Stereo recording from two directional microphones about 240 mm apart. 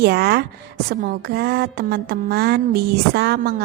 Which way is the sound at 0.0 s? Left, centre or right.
Right.